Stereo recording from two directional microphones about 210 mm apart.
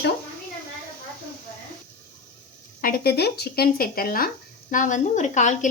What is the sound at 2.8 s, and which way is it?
A woman's voice, 45° left (ahead or behind).